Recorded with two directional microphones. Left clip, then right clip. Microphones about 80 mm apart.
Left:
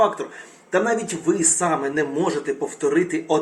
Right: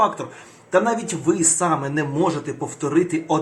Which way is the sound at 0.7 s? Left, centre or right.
Right.